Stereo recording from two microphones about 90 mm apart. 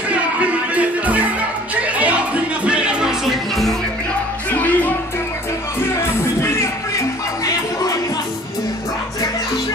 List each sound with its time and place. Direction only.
0.1 s music: 15° right (ahead or behind)
4.5 s music: 20° left (ahead or behind)
6.4 s music: 30° left (ahead or behind)